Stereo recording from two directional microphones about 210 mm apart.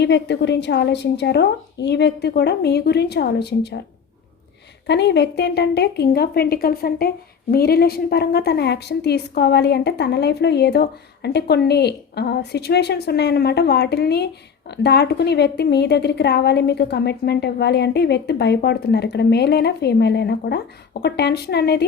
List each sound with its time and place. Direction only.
0.0 s a woman's voice: 55° left (ahead or behind)
4.9 s a woman's voice: 55° left (ahead or behind)